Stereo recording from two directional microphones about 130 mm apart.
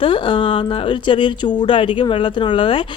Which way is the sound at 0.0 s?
40° left (ahead or behind).